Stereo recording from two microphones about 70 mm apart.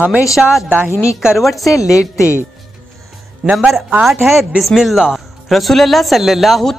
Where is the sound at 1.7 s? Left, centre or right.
Left.